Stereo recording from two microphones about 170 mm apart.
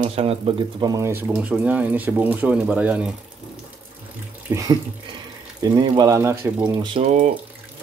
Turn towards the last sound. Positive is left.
turn(degrees=-45)  # may be behind; listen again after turning